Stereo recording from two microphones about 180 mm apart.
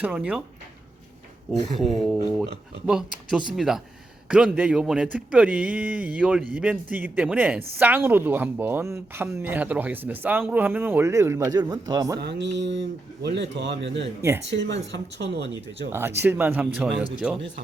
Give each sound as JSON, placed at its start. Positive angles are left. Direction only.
{"t": 0.0, "sound": "speech", "side_deg": -5}
{"t": 1.8, "sound": "speech", "side_deg": 0}
{"t": 12.2, "sound": "mantra", "side_deg": -75}
{"t": 13.2, "sound": "a man's voice", "side_deg": -75}
{"t": 14.2, "sound": "speech", "side_deg": -15}
{"t": 14.4, "sound": "a man's voice", "side_deg": -75}
{"t": 15.9, "sound": "speech", "side_deg": -15}